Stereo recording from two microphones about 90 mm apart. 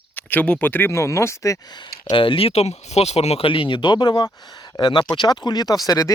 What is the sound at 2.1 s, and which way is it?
Speech, 70° left (ahead or behind).